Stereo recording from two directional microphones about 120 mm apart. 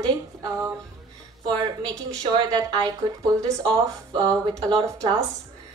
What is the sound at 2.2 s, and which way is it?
A woman's voice, 30° right (ahead or behind).